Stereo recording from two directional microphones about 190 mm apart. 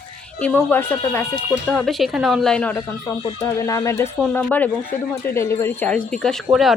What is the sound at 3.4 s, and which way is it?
Speech, 15° left (ahead or behind).